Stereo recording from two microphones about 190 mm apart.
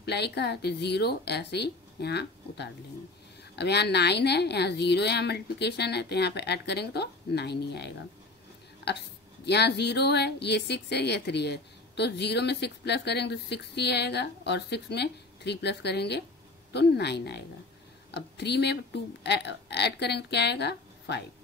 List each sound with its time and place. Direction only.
0.0 s a woman's voice: 60° left (ahead or behind)
9.5 s a woman's voice: 60° left (ahead or behind)